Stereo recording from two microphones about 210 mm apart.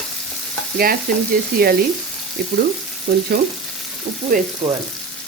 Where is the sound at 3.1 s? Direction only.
50° right (ahead or behind).